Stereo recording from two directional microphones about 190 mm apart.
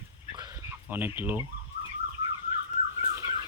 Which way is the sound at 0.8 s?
10° right (ahead or behind).